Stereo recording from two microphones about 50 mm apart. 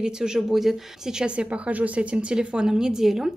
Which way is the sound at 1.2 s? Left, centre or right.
Right.